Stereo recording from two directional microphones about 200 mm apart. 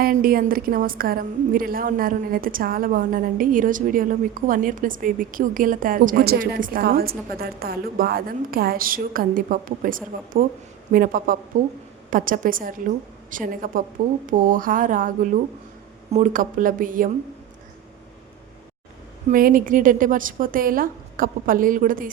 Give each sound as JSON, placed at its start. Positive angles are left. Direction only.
{"t": 0.0, "sound": "a woman's voice", "side_deg": -45}
{"t": 19.3, "sound": "a woman's voice", "side_deg": -45}